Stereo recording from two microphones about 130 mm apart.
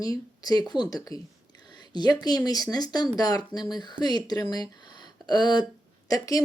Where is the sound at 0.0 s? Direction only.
30° left (ahead or behind).